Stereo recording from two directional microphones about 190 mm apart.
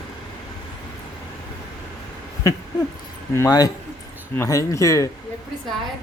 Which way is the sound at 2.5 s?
15° left (ahead or behind).